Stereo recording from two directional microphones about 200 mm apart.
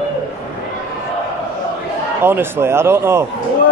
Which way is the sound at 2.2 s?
10° right (ahead or behind).